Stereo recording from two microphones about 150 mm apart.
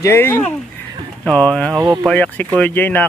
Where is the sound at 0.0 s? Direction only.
15° left (ahead or behind).